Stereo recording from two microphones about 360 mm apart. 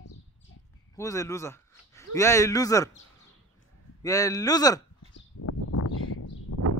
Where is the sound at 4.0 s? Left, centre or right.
Centre.